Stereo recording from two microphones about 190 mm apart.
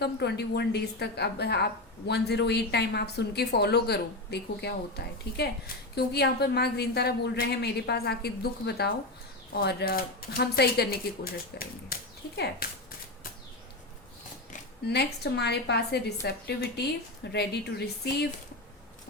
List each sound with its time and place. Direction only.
0.0 s a woman's voice: 60° left (ahead or behind)
14.8 s a woman's voice: 60° left (ahead or behind)